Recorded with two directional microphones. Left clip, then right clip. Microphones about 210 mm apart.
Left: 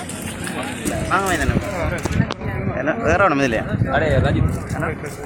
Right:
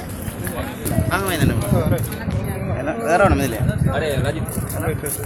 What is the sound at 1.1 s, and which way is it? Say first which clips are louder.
Speech: left 3 dB; 25° right (ahead or behind).